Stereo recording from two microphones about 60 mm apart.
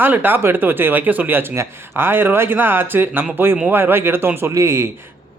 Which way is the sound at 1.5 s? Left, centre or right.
Right.